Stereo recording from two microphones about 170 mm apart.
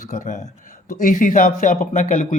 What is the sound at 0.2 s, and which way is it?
Speech, 45° left (ahead or behind).